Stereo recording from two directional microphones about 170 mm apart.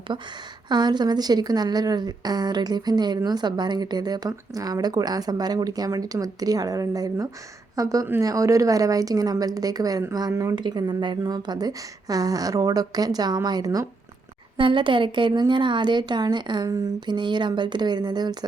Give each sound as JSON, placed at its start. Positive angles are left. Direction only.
{"t": 0.1, "sound": "a woman's voice", "side_deg": -25}